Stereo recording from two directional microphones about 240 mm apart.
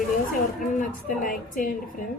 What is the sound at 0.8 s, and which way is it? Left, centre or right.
A woman's voice, left.